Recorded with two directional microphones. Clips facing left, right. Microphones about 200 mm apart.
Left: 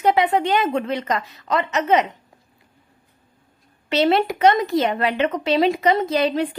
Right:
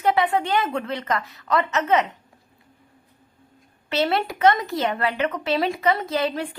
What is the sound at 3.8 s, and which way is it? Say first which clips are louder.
Speech: left 5 dB; 20° left (ahead or behind).